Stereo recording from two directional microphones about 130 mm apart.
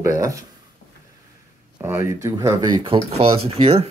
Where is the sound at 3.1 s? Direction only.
50° right (ahead or behind).